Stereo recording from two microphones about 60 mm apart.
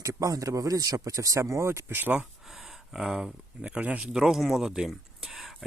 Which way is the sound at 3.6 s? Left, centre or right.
Right.